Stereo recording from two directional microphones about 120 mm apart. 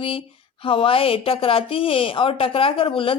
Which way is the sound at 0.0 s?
50° left (ahead or behind).